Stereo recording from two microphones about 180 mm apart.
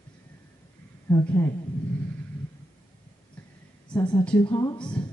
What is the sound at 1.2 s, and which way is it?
Speech, 15° left (ahead or behind).